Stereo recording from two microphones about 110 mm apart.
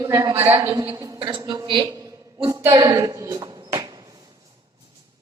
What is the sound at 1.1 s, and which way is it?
Speech, 50° right (ahead or behind).